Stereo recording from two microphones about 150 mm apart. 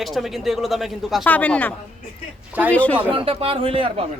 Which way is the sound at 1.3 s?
10° left (ahead or behind).